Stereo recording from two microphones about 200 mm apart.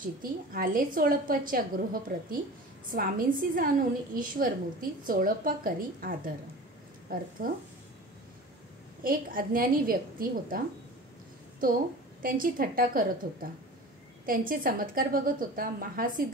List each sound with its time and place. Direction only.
0.2 s a woman's voice: 45° right (ahead or behind)
9.0 s a woman's voice: 45° right (ahead or behind)
11.6 s a woman's voice: 45° right (ahead or behind)